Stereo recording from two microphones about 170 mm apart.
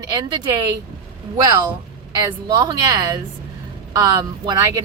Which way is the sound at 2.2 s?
25° right (ahead or behind).